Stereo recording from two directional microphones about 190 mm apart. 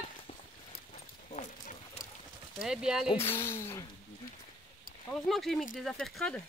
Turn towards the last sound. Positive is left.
turn(degrees=5)  # may be behind; listen again after turning